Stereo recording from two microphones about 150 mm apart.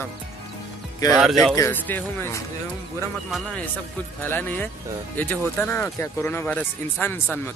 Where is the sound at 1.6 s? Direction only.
15° left (ahead or behind).